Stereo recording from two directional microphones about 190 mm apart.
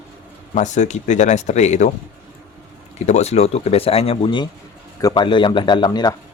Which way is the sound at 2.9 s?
35° left (ahead or behind).